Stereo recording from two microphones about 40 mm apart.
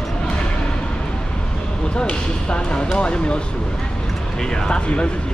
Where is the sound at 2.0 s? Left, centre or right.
Left.